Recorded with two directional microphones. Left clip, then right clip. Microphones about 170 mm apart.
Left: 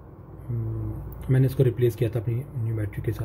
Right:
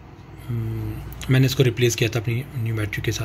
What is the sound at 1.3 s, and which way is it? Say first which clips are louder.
Speech: right 4 dB; centre (ahead or behind).